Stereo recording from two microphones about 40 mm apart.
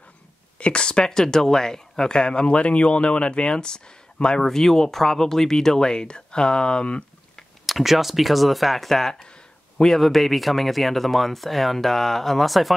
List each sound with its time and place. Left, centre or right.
0.6 s speech: left
4.4 s speech: centre; by 7.1 s left
7.6 s speech: centre